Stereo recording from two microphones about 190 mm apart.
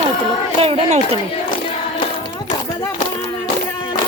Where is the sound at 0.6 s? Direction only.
30° right (ahead or behind).